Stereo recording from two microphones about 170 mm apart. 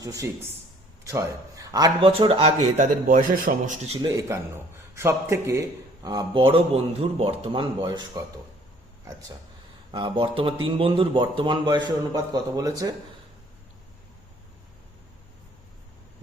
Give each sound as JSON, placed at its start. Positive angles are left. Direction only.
{"t": 0.0, "sound": "a man's voice", "side_deg": -20}
{"t": 2.0, "sound": "speech", "side_deg": -35}
{"t": 2.7, "sound": "speech", "side_deg": -50}
{"t": 4.0, "sound": "a man's voice", "side_deg": -20}
{"t": 9.9, "sound": "a man's voice", "side_deg": -30}